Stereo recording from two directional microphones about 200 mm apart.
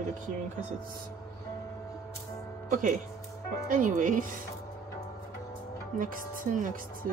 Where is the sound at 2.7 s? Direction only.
40° right (ahead or behind).